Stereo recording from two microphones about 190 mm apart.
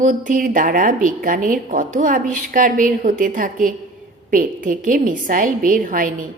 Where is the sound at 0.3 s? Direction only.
45° right (ahead or behind).